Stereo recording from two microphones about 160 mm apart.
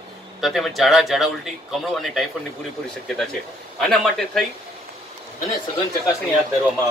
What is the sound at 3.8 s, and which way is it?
Speech, 5° left (ahead or behind).